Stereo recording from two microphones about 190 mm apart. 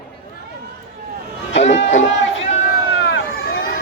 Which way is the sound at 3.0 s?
65° left (ahead or behind).